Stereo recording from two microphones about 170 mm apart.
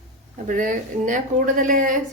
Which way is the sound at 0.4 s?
50° right (ahead or behind).